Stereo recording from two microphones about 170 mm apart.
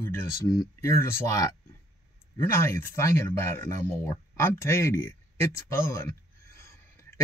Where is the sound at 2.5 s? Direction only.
15° left (ahead or behind).